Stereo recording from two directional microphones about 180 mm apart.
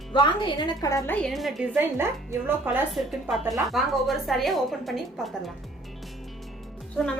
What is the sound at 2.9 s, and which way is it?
Speech, centre (ahead or behind).